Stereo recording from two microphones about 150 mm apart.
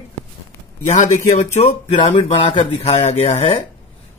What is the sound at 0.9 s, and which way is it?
Speech, 50° left (ahead or behind).